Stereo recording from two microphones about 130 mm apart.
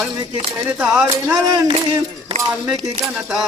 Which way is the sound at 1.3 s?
25° right (ahead or behind).